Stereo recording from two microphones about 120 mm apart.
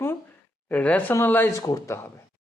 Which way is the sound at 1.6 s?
30° left (ahead or behind).